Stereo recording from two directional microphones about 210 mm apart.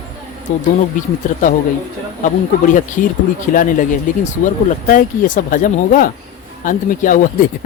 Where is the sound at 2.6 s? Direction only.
40° left (ahead or behind).